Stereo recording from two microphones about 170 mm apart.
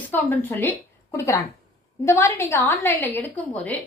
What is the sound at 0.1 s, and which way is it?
A woman's voice, 10° left (ahead or behind).